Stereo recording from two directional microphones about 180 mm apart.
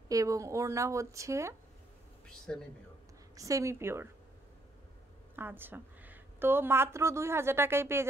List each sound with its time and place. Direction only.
0.1 s a woman's voice: 20° right (ahead or behind)
2.2 s speech: 5° left (ahead or behind)
3.3 s a woman's voice: 20° right (ahead or behind)
5.3 s a woman's voice: 10° right (ahead or behind)